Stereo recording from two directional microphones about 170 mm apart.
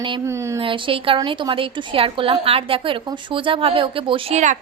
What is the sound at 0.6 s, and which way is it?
A woman's voice, 30° right (ahead or behind).